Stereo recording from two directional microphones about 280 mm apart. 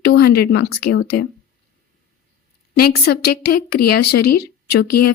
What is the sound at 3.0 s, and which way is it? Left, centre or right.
A woman's voice, left.